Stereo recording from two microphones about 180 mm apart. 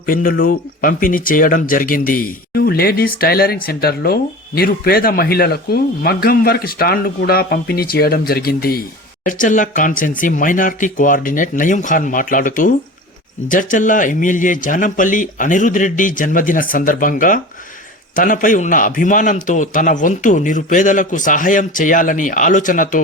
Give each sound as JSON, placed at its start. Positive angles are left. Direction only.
{"t": 0.0, "sound": "speech", "side_deg": 50}
{"t": 9.2, "sound": "a man's voice", "side_deg": 45}